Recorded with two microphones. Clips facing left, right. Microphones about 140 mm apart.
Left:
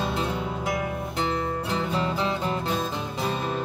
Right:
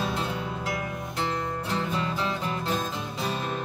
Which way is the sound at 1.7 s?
20° left (ahead or behind).